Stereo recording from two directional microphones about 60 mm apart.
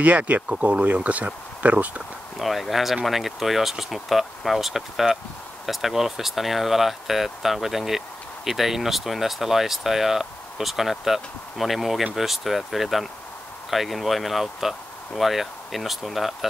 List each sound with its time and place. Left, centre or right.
0.0 s speech: right
2.3 s speech: centre